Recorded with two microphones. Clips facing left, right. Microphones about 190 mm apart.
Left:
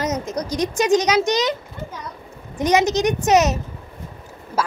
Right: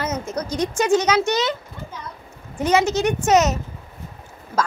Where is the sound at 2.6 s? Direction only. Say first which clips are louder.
Left 1 dB; 15° left (ahead or behind).